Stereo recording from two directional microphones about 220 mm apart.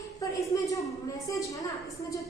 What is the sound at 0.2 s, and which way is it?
A woman's voice, 15° left (ahead or behind).